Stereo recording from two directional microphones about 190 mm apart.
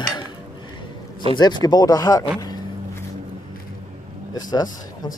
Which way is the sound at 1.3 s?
20° left (ahead or behind).